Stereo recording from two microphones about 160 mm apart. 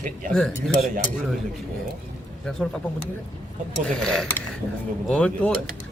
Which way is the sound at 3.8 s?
5° left (ahead or behind).